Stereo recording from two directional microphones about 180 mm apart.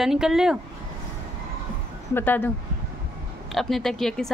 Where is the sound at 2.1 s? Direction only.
10° left (ahead or behind).